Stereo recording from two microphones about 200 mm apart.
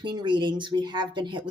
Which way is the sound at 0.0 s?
25° right (ahead or behind).